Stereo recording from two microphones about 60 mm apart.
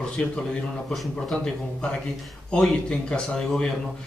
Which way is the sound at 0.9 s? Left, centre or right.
Centre.